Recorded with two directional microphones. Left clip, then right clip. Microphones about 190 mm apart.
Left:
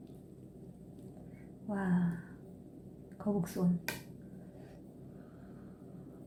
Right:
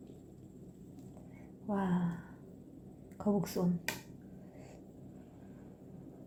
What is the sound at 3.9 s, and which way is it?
Finger snapping, centre (ahead or behind).